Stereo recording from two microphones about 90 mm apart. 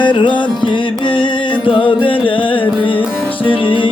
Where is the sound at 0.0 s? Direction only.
65° left (ahead or behind).